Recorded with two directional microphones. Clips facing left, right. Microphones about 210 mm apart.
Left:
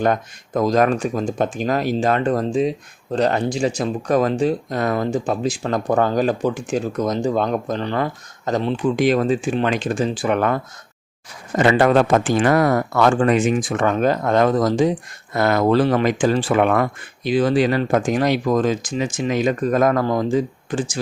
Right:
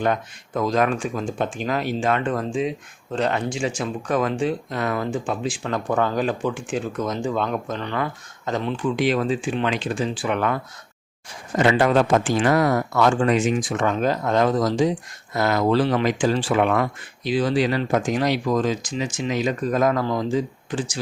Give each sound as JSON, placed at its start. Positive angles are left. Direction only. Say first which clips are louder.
{"t": 0.0, "sound": "speech", "louder": "left 3 dB", "side_deg": 40}